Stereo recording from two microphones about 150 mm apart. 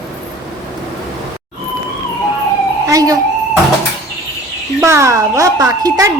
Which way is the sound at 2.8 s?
25° right (ahead or behind).